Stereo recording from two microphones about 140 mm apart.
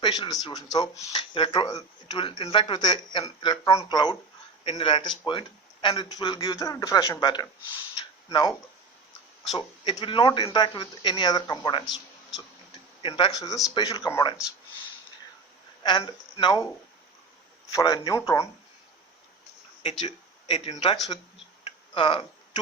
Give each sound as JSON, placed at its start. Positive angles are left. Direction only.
{"t": 0.0, "sound": "speech", "side_deg": 30}
{"t": 7.9, "sound": "a sound", "side_deg": 30}
{"t": 9.9, "sound": "speech", "side_deg": 35}
{"t": 13.0, "sound": "speech", "side_deg": 40}
{"t": 15.8, "sound": "speech", "side_deg": 30}
{"t": 17.7, "sound": "speech", "side_deg": 30}
{"t": 19.8, "sound": "speech", "side_deg": 50}